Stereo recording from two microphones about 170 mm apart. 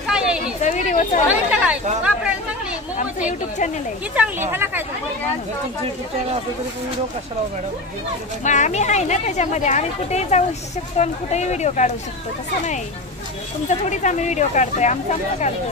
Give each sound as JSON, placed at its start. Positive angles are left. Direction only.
{"t": 0.0, "sound": "a sound", "side_deg": -5}
{"t": 0.6, "sound": "speech", "side_deg": 45}
{"t": 1.5, "sound": "chatter", "side_deg": -5}
{"t": 3.3, "sound": "speech", "side_deg": 45}
{"t": 4.1, "sound": "speech", "side_deg": -10}
{"t": 8.5, "sound": "speech", "side_deg": 45}
{"t": 13.7, "sound": "speech", "side_deg": 45}